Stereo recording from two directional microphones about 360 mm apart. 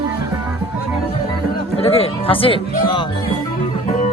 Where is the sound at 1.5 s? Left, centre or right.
Centre.